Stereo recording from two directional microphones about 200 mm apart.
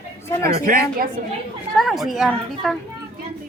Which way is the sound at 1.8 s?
Centre (ahead or behind).